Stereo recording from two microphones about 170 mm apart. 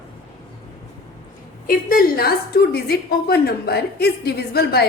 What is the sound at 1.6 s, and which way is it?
A woman's voice, 60° left (ahead or behind).